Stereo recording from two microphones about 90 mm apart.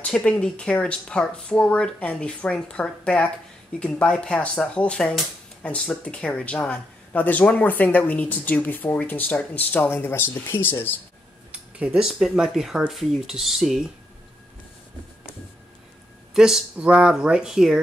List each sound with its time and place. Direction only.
0.0 s speech: 10° left (ahead or behind)
11.8 s speech: 10° right (ahead or behind)
16.3 s speech: 5° right (ahead or behind)